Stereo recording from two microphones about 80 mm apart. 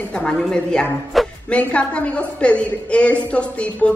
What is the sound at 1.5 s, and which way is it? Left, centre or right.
A woman's voice, centre.